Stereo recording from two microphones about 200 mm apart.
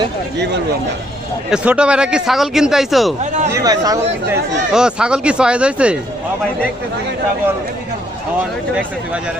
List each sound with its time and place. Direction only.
0.3 s speech: 60° right (ahead or behind)
1.5 s a man's voice: 5° right (ahead or behind)
3.5 s speech: 20° right (ahead or behind)
4.3 s a man's voice: 5° right (ahead or behind)